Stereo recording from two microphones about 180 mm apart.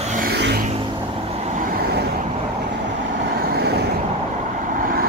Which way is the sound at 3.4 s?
60° right (ahead or behind).